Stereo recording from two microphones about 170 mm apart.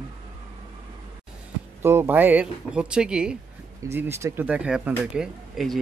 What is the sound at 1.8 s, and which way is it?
Speech, 15° right (ahead or behind).